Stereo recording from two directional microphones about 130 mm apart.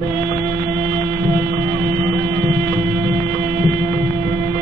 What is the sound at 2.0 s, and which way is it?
Music, 25° left (ahead or behind).